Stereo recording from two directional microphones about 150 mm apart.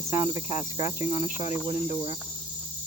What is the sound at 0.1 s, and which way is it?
Cricket, 50° left (ahead or behind).